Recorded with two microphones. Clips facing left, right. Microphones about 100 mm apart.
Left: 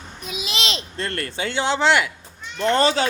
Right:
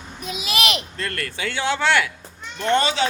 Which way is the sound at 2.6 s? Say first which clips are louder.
Left 1 dB; 35° left (ahead or behind).